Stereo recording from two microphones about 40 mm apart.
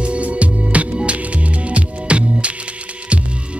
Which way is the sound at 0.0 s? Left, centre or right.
Right.